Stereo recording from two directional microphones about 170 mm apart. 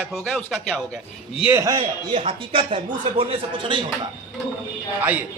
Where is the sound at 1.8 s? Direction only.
30° right (ahead or behind).